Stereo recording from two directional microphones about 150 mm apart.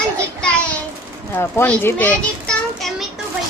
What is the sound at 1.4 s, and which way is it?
Children playing, 15° left (ahead or behind).